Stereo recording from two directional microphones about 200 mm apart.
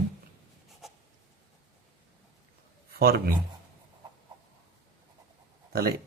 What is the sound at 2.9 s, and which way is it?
Speech, 50° right (ahead or behind).